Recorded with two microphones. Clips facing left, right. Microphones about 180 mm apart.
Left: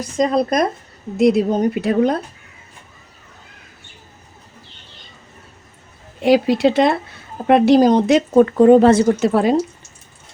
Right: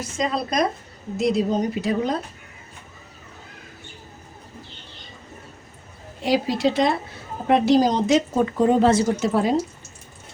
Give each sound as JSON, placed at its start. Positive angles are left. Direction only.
{"t": 0.2, "sound": "speech", "side_deg": 50}
{"t": 6.2, "sound": "speech", "side_deg": 60}